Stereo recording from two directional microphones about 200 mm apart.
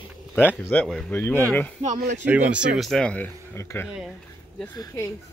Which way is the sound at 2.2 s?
10° right (ahead or behind).